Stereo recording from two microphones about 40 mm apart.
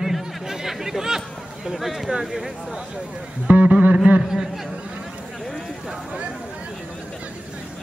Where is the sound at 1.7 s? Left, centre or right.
Centre.